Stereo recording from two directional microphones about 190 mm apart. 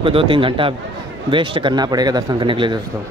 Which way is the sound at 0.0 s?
30° right (ahead or behind).